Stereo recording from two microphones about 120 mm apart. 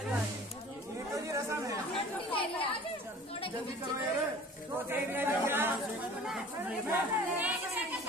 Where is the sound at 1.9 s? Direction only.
50° left (ahead or behind).